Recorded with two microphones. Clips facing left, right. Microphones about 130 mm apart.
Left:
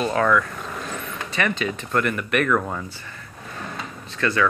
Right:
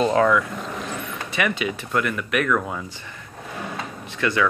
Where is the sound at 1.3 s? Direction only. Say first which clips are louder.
Even; 10° right (ahead or behind).